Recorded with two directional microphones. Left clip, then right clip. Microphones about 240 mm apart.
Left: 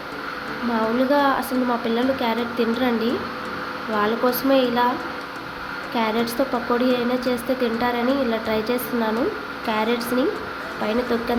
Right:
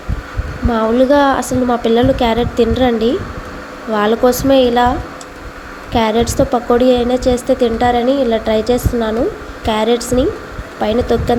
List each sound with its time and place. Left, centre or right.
1.1 s speech: right
5.9 s speech: right